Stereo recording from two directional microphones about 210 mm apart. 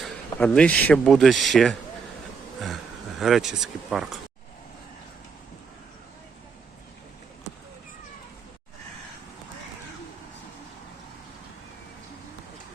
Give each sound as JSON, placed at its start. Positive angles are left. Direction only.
{"t": 0.0, "sound": "speech", "side_deg": 5}
{"t": 3.2, "sound": "speech", "side_deg": 0}